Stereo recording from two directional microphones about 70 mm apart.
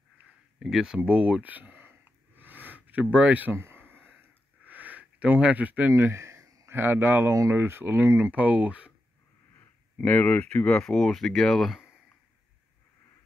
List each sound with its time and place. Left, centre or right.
0.6 s a sound: centre; by 5.9 s right
5.9 s a sound: right
6.7 s speech: right
8.4 s speech: right
9.6 s speech: left
10.8 s speech: centre